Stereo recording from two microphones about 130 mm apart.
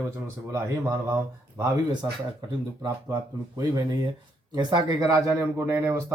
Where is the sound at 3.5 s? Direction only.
30° right (ahead or behind).